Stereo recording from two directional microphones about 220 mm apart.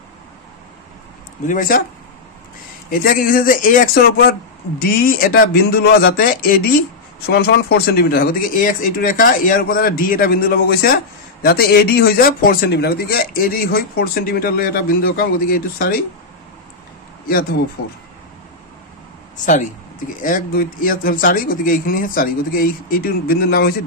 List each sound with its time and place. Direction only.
1.4 s speech: 35° left (ahead or behind)
2.9 s speech: 40° left (ahead or behind)
19.3 s speech: 35° left (ahead or behind)